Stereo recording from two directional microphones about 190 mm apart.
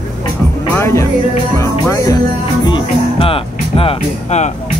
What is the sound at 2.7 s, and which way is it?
Music, 30° left (ahead or behind).